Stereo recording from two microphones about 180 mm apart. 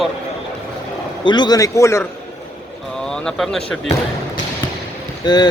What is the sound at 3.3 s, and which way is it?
Speech, centre (ahead or behind).